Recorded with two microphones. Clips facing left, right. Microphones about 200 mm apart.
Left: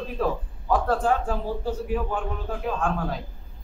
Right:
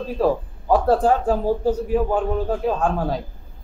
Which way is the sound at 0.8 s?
35° right (ahead or behind).